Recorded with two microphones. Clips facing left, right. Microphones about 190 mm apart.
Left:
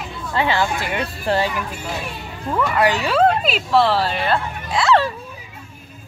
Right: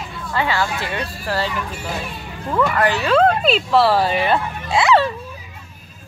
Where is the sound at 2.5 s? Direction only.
10° left (ahead or behind).